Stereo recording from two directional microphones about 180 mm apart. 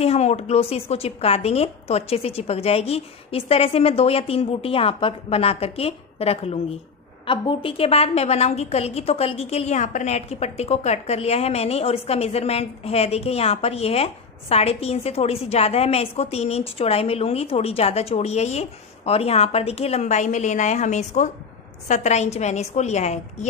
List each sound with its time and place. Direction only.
0.0 s a woman's voice: 35° left (ahead or behind)